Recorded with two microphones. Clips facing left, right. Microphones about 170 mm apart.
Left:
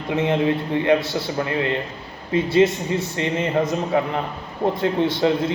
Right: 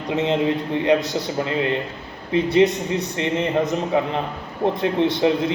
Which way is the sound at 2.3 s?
20° right (ahead or behind).